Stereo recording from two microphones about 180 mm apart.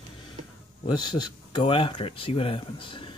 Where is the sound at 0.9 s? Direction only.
25° left (ahead or behind).